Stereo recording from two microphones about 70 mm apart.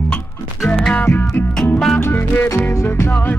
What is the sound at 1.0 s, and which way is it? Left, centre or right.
Music, left.